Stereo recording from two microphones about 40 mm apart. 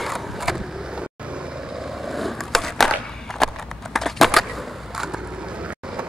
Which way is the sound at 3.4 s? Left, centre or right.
Centre.